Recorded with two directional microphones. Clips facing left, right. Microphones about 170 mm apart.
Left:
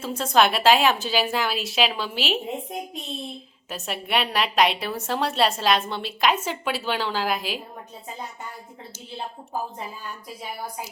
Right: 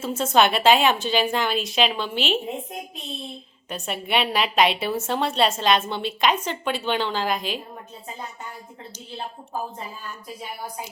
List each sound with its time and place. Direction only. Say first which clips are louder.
0.0 s a woman's voice: right 1 dB; centre (ahead or behind)
3.7 s a woman's voice: right 1 dB; centre (ahead or behind)